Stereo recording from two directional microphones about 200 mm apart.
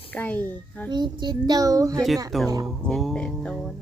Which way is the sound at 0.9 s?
20° right (ahead or behind).